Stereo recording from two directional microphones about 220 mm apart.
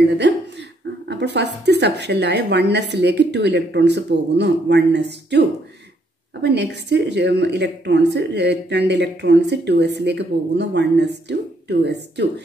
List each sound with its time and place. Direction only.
1.0 s speech: 50° right (ahead or behind)
6.4 s speech: 50° right (ahead or behind)